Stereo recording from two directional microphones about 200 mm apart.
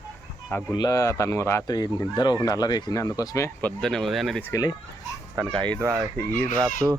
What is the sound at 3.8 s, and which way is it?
Speech, centre (ahead or behind).